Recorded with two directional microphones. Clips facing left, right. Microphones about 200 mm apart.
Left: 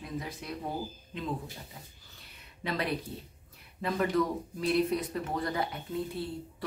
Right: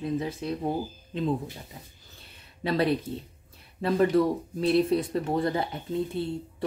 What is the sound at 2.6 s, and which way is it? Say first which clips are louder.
Speech: right 8 dB; 30° right (ahead or behind).